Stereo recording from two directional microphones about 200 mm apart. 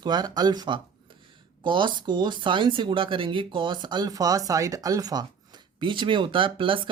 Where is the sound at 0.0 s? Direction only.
20° right (ahead or behind).